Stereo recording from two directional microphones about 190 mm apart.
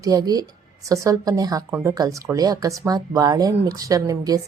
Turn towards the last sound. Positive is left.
turn(degrees=-20)  # may be behind; listen again after turning